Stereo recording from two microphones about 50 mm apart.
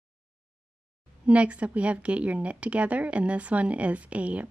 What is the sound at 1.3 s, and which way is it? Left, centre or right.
Speech, right.